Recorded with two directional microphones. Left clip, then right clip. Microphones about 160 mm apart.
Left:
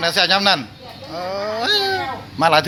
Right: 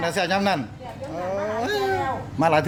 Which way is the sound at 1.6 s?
5° left (ahead or behind).